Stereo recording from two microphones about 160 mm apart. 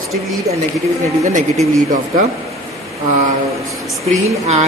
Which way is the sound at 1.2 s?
45° right (ahead or behind).